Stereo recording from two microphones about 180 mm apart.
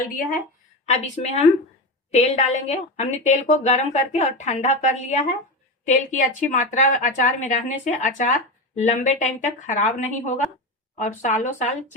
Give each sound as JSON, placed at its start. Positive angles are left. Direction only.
{"t": 0.0, "sound": "speech", "side_deg": 50}
{"t": 0.9, "sound": "a woman's voice", "side_deg": 40}